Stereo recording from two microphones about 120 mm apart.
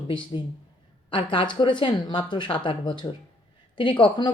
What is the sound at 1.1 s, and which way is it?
Speech, 45° left (ahead or behind).